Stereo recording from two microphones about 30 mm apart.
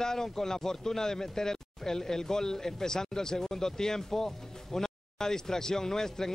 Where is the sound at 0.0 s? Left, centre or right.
Centre.